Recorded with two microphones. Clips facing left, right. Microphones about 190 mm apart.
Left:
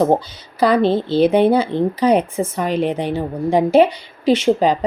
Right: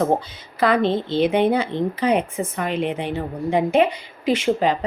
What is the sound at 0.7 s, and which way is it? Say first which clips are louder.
Speech: left 4 dB; 35° left (ahead or behind).